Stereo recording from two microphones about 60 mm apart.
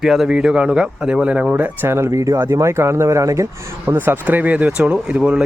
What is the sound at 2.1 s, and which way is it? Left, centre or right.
Speech, right.